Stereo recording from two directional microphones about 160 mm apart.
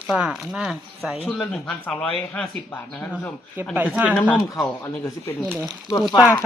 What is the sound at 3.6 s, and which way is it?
Speech, 15° right (ahead or behind).